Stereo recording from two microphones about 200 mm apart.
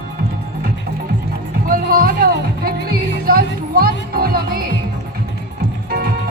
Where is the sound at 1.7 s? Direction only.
45° right (ahead or behind).